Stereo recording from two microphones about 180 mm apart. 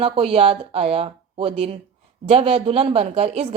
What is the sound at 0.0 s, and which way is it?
Speech, 30° right (ahead or behind).